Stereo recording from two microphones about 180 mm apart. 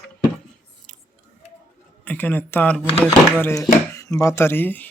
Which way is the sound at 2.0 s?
10° left (ahead or behind).